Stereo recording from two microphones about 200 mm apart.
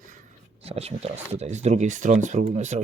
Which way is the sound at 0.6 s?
30° right (ahead or behind).